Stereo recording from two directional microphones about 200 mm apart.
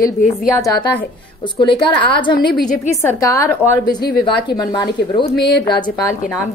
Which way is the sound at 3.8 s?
50° left (ahead or behind).